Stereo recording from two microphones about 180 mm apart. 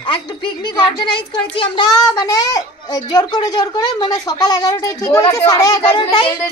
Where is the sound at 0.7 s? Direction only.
25° left (ahead or behind).